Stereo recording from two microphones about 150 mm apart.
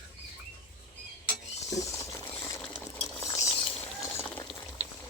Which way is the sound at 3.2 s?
20° left (ahead or behind).